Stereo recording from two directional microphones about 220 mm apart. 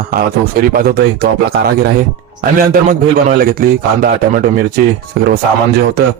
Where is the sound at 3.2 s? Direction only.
45° right (ahead or behind).